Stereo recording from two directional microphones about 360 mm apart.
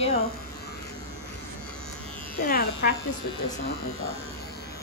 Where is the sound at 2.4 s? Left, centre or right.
Left.